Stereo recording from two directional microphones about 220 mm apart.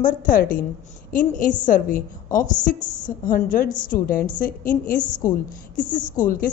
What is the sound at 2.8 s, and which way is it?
Speech, 20° left (ahead or behind).